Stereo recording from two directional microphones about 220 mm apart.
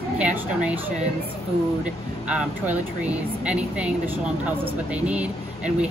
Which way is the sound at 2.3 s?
5° right (ahead or behind).